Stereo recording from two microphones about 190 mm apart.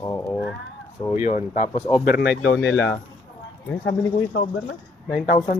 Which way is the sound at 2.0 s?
55° left (ahead or behind).